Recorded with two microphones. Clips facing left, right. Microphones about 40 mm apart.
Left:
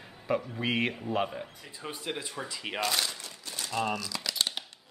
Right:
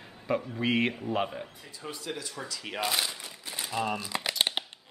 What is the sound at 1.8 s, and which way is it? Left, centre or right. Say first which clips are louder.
Speech: left 1 dB; left.